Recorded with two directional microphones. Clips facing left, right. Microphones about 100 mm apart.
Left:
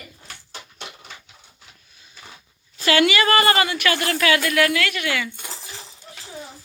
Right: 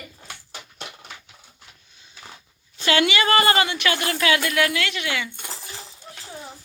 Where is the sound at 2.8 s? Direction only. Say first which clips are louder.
Left 2 dB; 25° right (ahead or behind).